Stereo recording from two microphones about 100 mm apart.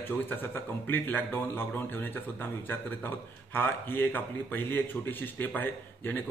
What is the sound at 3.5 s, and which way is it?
Speech, 20° left (ahead or behind).